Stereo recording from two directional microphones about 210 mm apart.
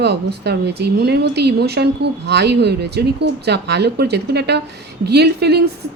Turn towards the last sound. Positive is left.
turn(degrees=-50)  # may be behind; listen again after turning